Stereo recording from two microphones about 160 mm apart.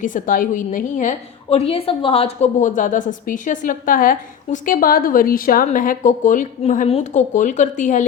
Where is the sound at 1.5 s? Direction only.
40° left (ahead or behind).